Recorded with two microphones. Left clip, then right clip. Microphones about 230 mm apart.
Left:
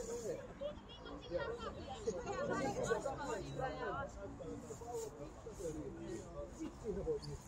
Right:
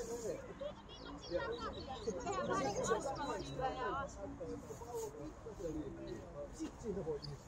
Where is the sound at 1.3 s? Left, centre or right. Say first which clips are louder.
Right 2 dB; right.